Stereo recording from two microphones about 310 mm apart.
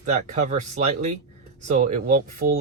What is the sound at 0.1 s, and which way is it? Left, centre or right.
Speech, right.